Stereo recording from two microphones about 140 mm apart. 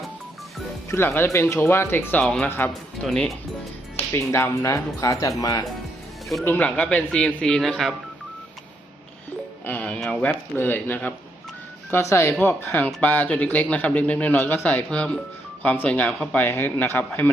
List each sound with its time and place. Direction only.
0.9 s a man's voice: 15° left (ahead or behind)
2.2 s speech: 5° left (ahead or behind)
2.5 s a man's voice: 15° left (ahead or behind)
3.0 s speech: 5° left (ahead or behind)
4.1 s speech: 20° left (ahead or behind)
6.4 s a man's voice: 10° left (ahead or behind)
9.6 s a man's voice: 10° left (ahead or behind)